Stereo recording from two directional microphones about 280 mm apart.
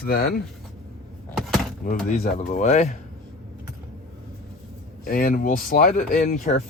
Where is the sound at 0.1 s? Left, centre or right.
Left.